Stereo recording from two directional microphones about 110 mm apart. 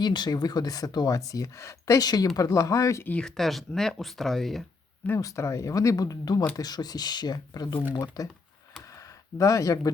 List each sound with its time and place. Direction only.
0.0 s speech: 40° left (ahead or behind)
3.1 s speech: 10° left (ahead or behind)
5.0 s speech: 25° left (ahead or behind)
9.4 s speech: 30° left (ahead or behind)